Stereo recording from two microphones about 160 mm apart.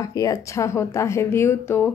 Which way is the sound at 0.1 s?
20° left (ahead or behind).